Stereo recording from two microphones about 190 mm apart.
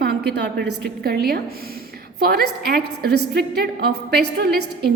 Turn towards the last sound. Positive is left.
turn(degrees=-55)  # may be behind; listen again after turning